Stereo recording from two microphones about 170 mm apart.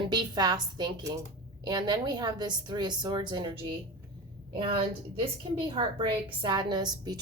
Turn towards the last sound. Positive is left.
turn(degrees=-25)  # may be behind; listen again after turning